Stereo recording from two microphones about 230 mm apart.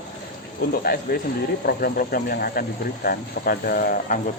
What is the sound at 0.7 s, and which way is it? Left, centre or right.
Speech, left.